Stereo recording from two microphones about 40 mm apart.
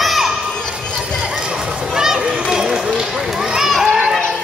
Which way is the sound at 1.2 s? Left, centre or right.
Right.